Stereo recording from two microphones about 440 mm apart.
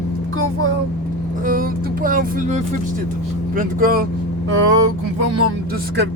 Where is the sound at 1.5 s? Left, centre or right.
Centre.